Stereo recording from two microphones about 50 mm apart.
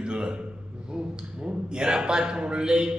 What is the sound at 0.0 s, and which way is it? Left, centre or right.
Speech, centre.